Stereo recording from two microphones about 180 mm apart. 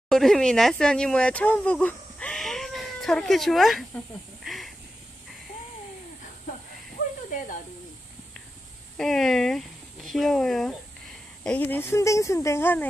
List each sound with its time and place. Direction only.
0.1 s speech: centre (ahead or behind)
4.5 s a sound: centre (ahead or behind)
8.9 s speech: centre (ahead or behind)